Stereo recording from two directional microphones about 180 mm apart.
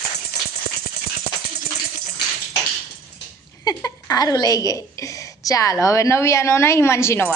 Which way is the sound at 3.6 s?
20° left (ahead or behind).